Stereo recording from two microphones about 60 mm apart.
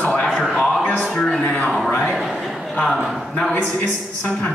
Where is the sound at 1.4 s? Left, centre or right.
Centre.